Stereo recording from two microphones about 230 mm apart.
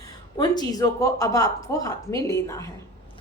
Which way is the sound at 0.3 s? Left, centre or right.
Centre.